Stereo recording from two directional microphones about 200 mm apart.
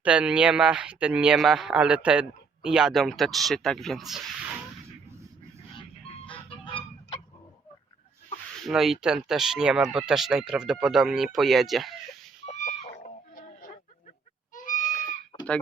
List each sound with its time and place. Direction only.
0.0 s speech: 5° right (ahead or behind)
6.2 s fowl: 25° left (ahead or behind)
8.6 s speech: centre (ahead or behind)
12.5 s chicken: 35° left (ahead or behind)
14.5 s goat: 40° left (ahead or behind)